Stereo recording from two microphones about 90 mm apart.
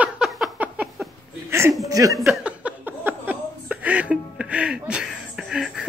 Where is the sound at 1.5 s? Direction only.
30° right (ahead or behind).